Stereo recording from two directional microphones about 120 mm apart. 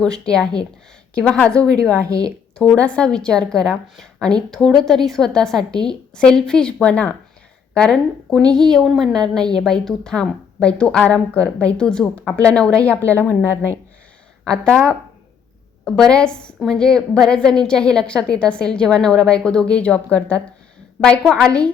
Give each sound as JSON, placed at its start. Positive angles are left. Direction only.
{"t": 0.0, "sound": "a woman's voice", "side_deg": 5}
{"t": 2.0, "sound": "a woman's voice", "side_deg": -30}
{"t": 2.6, "sound": "a woman's voice", "side_deg": 10}
{"t": 14.5, "sound": "a woman's voice", "side_deg": 10}